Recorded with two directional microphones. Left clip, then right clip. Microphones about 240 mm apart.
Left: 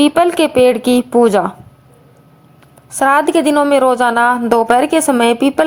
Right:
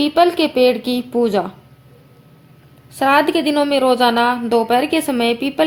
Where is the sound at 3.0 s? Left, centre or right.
Left.